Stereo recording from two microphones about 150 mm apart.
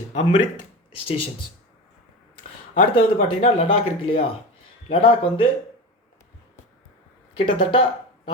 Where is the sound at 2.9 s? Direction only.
35° left (ahead or behind).